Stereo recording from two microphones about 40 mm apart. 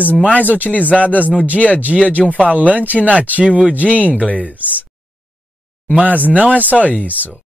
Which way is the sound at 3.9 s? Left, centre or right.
Left.